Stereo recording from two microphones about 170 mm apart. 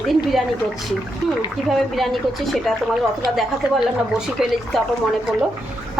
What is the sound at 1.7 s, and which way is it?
Dishes, centre (ahead or behind).